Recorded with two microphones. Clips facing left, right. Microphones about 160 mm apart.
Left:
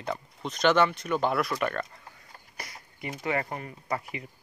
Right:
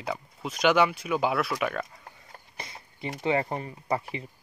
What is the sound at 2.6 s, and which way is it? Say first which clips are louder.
Speech: right 2 dB; 25° right (ahead or behind).